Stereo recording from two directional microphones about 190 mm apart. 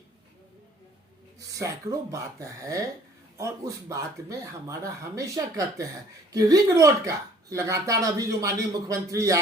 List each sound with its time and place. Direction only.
1.4 s speech: 15° right (ahead or behind)